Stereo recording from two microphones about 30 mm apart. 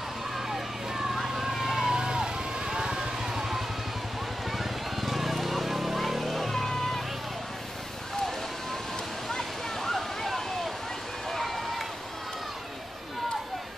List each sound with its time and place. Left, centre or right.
0.5 s vehicle: centre
1.9 s vehicle: right
5.0 s a sound: centre
6.5 s vehicle: centre
9.4 s waterfall: centre
11.2 s run: centre